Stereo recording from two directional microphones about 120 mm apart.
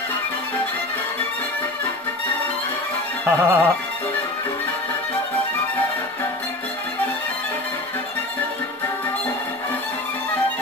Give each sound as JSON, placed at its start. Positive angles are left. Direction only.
{"t": 3.3, "sound": "music", "side_deg": -20}